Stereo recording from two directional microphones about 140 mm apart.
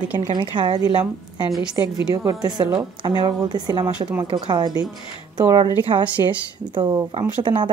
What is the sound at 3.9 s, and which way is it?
Speech, 10° right (ahead or behind).